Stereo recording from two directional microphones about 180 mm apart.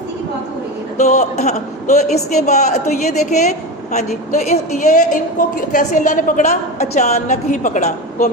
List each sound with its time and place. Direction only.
0.9 s a woman's voice: 40° left (ahead or behind)